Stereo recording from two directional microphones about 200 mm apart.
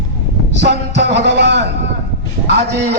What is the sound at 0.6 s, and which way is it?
Speech, 60° right (ahead or behind).